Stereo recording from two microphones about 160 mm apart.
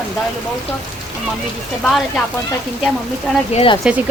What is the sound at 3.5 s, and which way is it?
Speech, 35° left (ahead or behind).